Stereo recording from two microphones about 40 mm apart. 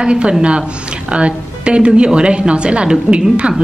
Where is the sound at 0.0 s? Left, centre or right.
Right.